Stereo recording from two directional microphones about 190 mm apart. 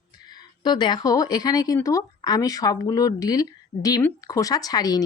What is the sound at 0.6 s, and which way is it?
Speech, 25° left (ahead or behind).